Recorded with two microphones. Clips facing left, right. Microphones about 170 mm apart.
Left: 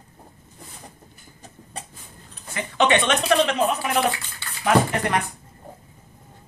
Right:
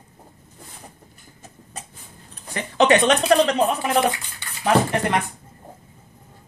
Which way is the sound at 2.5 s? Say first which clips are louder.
Right 3 dB; 40° right (ahead or behind).